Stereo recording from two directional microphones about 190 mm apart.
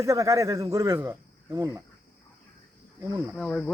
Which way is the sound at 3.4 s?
5° left (ahead or behind).